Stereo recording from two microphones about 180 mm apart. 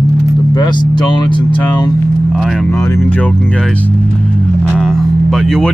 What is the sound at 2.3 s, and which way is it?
Speech, centre (ahead or behind).